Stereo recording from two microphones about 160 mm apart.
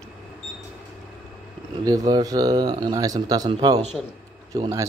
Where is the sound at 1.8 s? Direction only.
25° right (ahead or behind).